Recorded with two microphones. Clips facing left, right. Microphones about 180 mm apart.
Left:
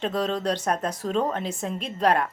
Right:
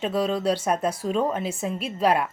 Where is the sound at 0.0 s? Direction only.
10° right (ahead or behind).